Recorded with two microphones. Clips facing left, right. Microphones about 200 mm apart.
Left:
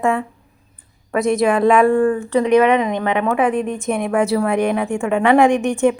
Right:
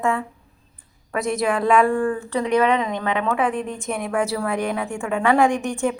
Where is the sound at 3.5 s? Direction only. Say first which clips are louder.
Left 6 dB; 65° left (ahead or behind).